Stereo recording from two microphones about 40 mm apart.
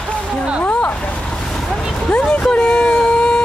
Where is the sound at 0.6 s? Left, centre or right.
Left.